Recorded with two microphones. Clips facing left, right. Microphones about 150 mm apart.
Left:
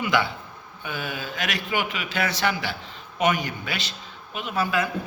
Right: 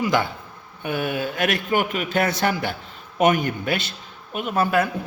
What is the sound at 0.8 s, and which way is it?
A man's voice, 55° right (ahead or behind).